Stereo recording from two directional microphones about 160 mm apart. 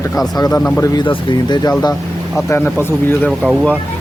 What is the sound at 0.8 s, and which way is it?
Speech, 30° left (ahead or behind).